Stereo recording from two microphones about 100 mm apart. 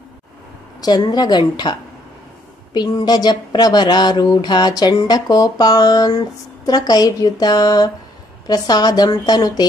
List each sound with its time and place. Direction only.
0.7 s a woman's voice: 45° left (ahead or behind)